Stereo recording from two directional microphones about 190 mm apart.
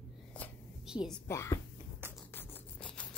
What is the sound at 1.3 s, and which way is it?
Speech, 15° left (ahead or behind).